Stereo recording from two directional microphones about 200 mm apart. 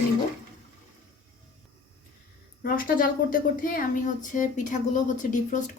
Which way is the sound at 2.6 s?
45° left (ahead or behind).